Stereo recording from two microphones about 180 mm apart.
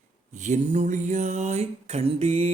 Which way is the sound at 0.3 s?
40° right (ahead or behind).